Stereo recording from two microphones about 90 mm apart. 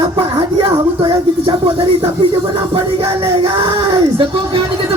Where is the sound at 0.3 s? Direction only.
75° right (ahead or behind).